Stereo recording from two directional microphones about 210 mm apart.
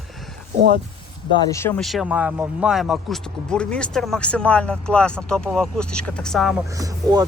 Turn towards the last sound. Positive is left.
turn(degrees=-20)  # may be behind; listen again after turning